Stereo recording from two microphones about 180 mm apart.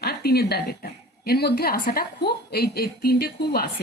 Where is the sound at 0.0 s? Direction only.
60° left (ahead or behind).